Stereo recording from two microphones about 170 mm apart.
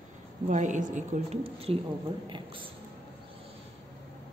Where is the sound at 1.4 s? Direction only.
35° right (ahead or behind).